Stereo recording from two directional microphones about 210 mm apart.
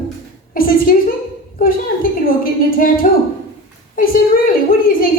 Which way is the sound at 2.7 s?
40° left (ahead or behind).